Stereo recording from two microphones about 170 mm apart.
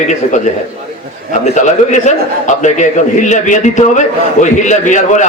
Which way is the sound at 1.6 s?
45° left (ahead or behind).